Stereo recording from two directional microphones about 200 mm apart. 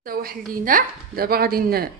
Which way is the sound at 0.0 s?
50° right (ahead or behind).